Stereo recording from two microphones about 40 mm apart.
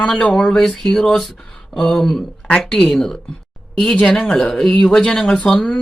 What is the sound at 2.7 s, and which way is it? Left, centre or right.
Speech, centre.